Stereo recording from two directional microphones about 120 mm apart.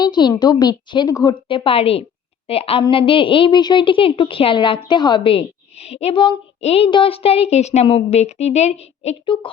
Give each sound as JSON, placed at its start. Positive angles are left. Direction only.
{"t": 0.0, "sound": "a woman's voice", "side_deg": 35}
{"t": 1.5, "sound": "a woman's voice", "side_deg": 45}
{"t": 9.2, "sound": "a woman's voice", "side_deg": 45}